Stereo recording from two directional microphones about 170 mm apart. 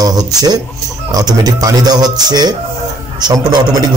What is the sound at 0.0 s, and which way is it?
Speech, 20° right (ahead or behind).